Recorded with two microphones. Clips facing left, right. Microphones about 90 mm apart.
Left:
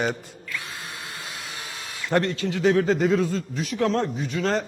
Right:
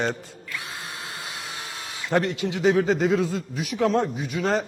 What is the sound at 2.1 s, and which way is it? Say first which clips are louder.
Speech: even; 10° right (ahead or behind).